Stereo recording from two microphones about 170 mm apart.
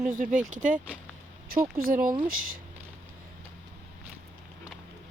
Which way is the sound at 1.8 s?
55° right (ahead or behind).